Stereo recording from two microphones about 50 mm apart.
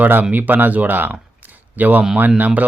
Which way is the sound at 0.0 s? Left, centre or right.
Right.